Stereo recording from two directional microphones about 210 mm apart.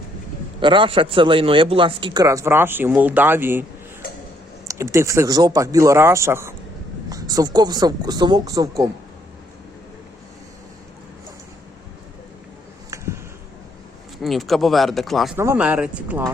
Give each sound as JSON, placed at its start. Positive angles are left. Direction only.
{"t": 0.6, "sound": "speech", "side_deg": -25}
{"t": 4.7, "sound": "speech", "side_deg": -15}
{"t": 14.2, "sound": "speech", "side_deg": 0}